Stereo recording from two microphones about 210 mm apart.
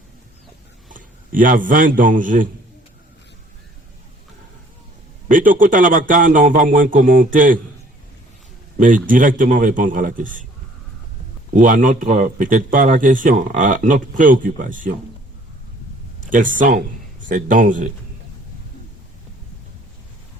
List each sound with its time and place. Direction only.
0.9 s a man's voice: 40° right (ahead or behind)
5.3 s speech: 40° right (ahead or behind)
9.0 s speech: 40° right (ahead or behind)
11.5 s speech: 40° right (ahead or behind)
16.2 s speech: 40° right (ahead or behind)